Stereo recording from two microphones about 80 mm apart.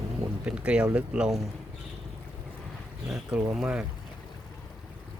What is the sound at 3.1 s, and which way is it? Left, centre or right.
Speech, centre.